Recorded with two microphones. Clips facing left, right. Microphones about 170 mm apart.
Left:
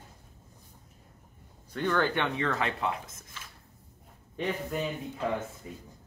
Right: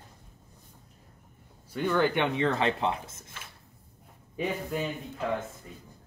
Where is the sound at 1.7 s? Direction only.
10° right (ahead or behind).